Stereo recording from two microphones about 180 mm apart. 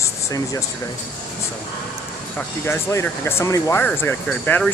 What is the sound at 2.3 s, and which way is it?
Speech, 15° left (ahead or behind).